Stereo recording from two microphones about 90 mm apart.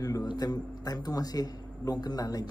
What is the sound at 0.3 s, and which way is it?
Speech, 45° left (ahead or behind).